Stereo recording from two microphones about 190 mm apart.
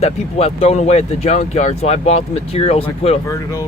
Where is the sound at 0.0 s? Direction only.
35° left (ahead or behind).